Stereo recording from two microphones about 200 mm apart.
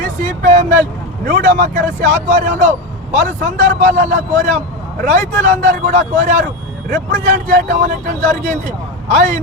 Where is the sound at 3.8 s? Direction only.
40° right (ahead or behind).